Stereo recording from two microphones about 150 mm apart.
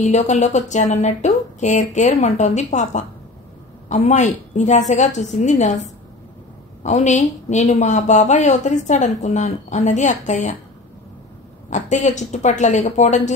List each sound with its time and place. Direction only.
0.0 s a woman's voice: 50° left (ahead or behind)
11.7 s a woman's voice: 55° left (ahead or behind)